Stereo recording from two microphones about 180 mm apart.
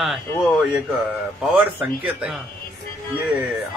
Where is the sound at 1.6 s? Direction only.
10° right (ahead or behind).